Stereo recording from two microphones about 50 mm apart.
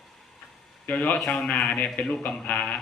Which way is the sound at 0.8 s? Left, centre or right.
Left.